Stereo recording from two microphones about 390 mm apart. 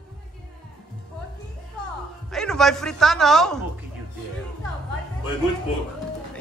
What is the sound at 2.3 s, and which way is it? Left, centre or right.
A man's voice, centre.